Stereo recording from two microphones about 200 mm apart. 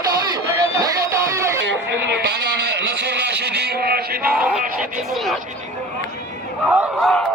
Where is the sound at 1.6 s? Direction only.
60° right (ahead or behind).